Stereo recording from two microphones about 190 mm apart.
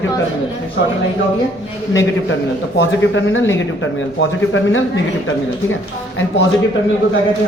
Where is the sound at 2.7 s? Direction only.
85° left.